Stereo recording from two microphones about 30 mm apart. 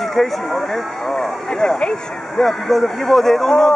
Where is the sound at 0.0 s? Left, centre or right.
Centre.